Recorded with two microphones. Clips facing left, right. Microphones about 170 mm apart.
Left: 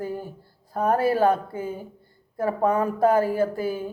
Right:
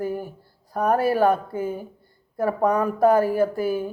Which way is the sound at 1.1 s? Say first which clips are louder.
Right 1 dB; 15° right (ahead or behind).